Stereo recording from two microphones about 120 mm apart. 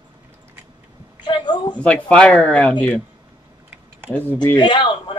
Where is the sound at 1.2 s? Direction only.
40° left (ahead or behind).